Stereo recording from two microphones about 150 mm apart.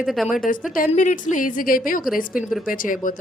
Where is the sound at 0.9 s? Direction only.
55° left (ahead or behind).